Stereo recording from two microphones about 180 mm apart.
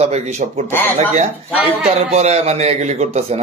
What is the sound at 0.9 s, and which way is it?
A man's voice, 40° right (ahead or behind).